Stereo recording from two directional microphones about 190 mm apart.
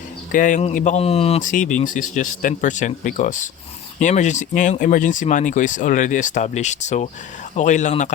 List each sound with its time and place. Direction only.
0.3 s speech: 45° left (ahead or behind)